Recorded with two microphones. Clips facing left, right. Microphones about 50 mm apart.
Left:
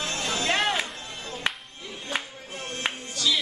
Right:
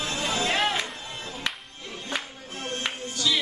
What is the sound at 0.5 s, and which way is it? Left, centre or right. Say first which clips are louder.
Music: left 2 dB; centre.